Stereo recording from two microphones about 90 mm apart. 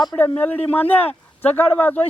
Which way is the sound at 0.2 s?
20° left (ahead or behind).